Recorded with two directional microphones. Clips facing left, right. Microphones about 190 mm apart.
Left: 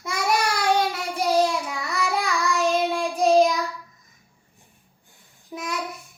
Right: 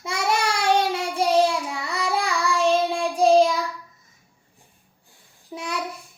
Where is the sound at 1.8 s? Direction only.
30° right (ahead or behind).